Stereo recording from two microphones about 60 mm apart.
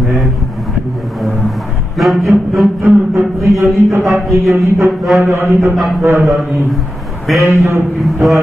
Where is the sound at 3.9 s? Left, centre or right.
Right.